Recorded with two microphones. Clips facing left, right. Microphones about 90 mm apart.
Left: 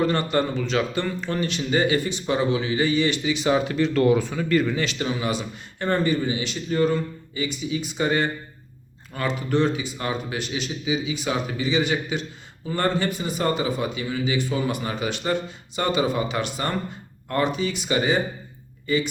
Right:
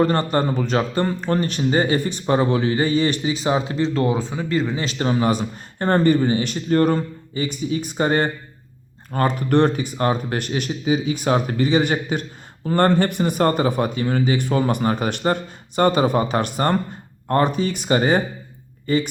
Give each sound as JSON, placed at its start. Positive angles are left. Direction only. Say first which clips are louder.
{"t": 0.0, "sound": "a man's voice", "louder": "right 3 dB", "side_deg": -40}
{"t": 9.1, "sound": "a man's voice", "louder": "right 5 dB", "side_deg": -55}